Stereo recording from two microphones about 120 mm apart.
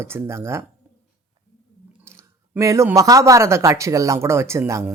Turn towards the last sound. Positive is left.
turn(degrees=-20)  # may be behind; listen again after turning